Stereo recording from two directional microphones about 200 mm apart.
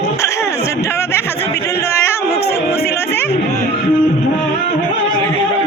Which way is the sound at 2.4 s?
15° left (ahead or behind).